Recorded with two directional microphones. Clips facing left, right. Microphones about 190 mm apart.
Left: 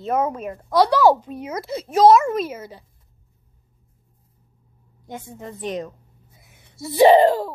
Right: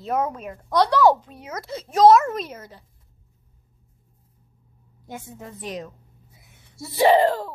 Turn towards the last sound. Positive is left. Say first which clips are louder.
# left 4 dB
turn(degrees=15)  # may be behind; listen again after turning